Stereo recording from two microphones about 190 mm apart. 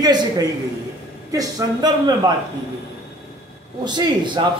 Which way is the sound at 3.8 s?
25° right (ahead or behind).